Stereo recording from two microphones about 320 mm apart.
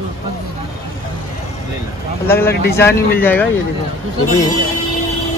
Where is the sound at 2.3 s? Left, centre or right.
Centre.